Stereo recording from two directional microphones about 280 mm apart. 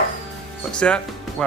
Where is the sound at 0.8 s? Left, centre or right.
Centre.